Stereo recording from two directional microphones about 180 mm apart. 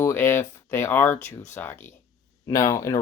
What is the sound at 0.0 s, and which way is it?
Speech, 15° left (ahead or behind).